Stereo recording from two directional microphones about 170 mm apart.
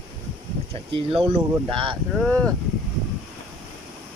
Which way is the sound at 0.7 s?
35° right (ahead or behind).